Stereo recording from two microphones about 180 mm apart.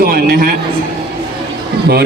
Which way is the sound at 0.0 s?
55° right (ahead or behind).